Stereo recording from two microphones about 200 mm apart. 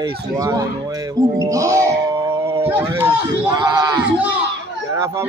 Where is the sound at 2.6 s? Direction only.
10° right (ahead or behind).